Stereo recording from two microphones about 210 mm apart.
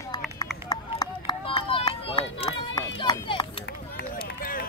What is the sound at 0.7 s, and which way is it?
Run, 20° left (ahead or behind).